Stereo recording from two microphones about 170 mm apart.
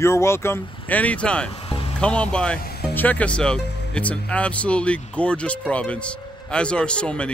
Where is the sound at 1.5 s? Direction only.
30° left (ahead or behind).